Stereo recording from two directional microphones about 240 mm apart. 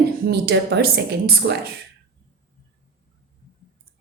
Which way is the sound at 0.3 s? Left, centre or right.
Right.